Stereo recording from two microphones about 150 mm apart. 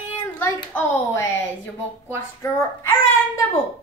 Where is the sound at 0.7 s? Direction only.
10° left (ahead or behind).